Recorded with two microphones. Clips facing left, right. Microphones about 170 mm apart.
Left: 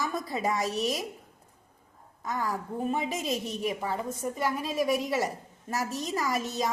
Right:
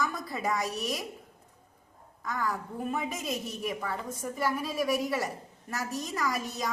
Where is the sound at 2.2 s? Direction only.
25° left (ahead or behind).